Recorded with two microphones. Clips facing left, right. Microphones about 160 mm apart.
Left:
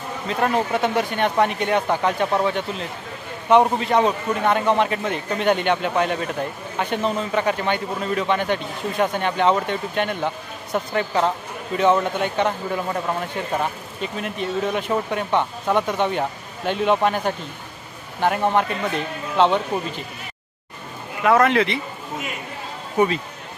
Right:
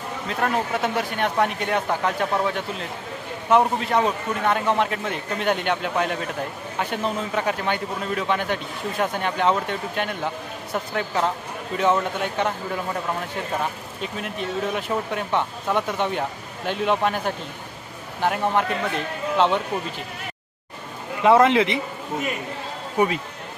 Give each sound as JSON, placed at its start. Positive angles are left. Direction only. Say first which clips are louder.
{"t": 0.3, "sound": "a man's voice", "louder": "left 3 dB", "side_deg": 0}
{"t": 14.0, "sound": "a man's voice", "louder": "left 3 dB", "side_deg": 0}
{"t": 21.2, "sound": "speech", "louder": "right 1 dB", "side_deg": -20}
{"t": 22.9, "sound": "speech", "louder": "left 2 dB", "side_deg": -10}